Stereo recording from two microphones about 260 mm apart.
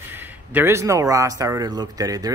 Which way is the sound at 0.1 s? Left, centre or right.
Centre.